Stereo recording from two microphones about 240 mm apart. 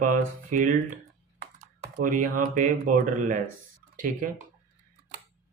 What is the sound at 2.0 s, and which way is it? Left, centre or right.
Speech, right.